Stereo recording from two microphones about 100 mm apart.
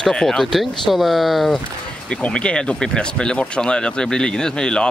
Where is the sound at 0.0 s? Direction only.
5° left (ahead or behind).